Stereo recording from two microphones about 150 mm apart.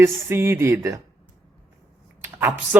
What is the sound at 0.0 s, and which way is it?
Speech, 15° right (ahead or behind).